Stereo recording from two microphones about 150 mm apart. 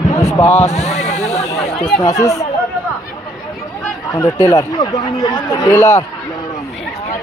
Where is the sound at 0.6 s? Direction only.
45° left (ahead or behind).